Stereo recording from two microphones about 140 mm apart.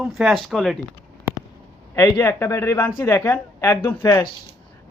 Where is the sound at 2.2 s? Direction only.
20° left (ahead or behind).